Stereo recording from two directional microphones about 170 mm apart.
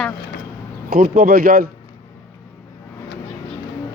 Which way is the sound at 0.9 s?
60° right (ahead or behind).